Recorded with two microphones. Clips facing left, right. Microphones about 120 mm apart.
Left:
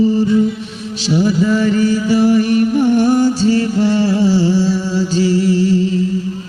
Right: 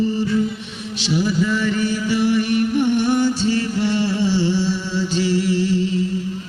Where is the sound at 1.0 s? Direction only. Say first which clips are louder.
Left 5 dB; 40° left (ahead or behind).